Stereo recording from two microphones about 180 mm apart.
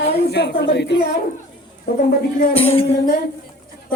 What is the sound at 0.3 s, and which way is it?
Speech, 70° left (ahead or behind).